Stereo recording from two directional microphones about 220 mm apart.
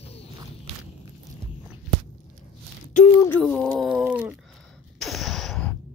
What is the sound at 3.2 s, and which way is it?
Speech, 5° left (ahead or behind).